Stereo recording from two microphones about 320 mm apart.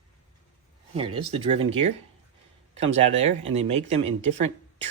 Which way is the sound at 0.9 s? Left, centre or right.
Centre.